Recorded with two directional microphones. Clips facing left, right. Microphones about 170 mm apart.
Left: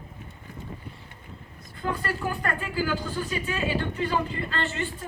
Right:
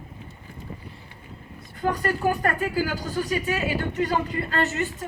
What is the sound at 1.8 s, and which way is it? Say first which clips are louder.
Speech: right 6 dB; 40° right (ahead or behind).